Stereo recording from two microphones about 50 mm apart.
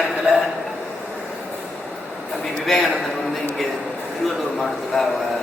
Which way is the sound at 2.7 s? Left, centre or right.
Centre.